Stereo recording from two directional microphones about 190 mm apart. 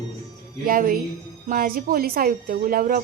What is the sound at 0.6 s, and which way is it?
A woman's voice, 45° right (ahead or behind).